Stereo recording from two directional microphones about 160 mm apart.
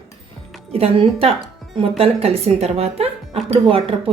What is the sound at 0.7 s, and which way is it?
Speech, 35° right (ahead or behind).